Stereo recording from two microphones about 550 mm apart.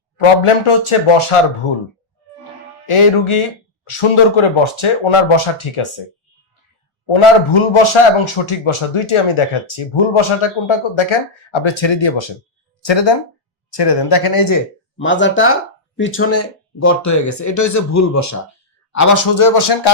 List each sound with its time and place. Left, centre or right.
0.4 s speech: left
2.8 s speech: left
7.1 s speech: left
14.9 s speech: centre; by 19.9 s left